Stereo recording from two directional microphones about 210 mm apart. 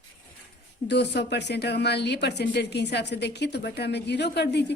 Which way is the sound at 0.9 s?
55° left (ahead or behind).